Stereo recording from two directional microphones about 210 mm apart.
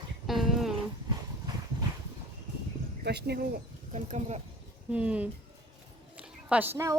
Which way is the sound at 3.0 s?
50° right (ahead or behind).